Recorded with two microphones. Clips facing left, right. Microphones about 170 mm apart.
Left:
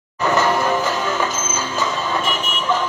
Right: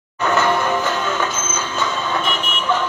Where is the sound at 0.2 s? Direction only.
Centre (ahead or behind).